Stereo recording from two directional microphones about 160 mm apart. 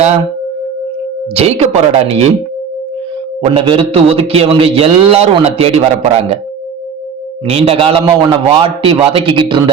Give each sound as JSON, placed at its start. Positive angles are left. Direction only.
{"t": 1.4, "sound": "a man's voice", "side_deg": -40}
{"t": 3.4, "sound": "a man's voice", "side_deg": -35}
{"t": 7.4, "sound": "a man's voice", "side_deg": -40}